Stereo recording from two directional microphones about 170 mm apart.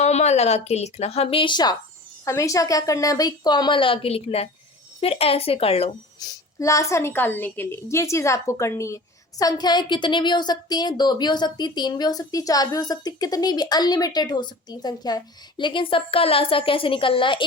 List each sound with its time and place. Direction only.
0.0 s a woman's voice: 40° left (ahead or behind)
6.1 s a woman's voice: 20° left (ahead or behind)